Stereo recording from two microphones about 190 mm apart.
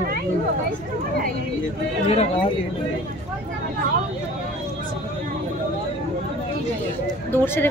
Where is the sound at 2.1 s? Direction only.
30° left (ahead or behind).